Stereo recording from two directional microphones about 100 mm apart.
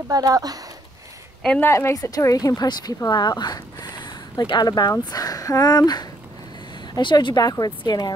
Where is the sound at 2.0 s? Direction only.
40° left (ahead or behind).